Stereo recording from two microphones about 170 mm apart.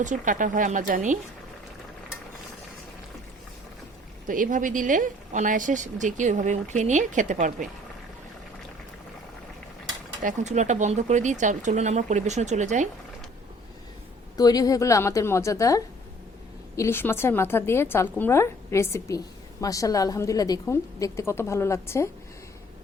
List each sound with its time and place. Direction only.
0.0 s a woman's voice: 50° right (ahead or behind)
4.3 s a woman's voice: 50° right (ahead or behind)
10.2 s a woman's voice: 45° right (ahead or behind)
14.3 s a woman's voice: 20° left (ahead or behind)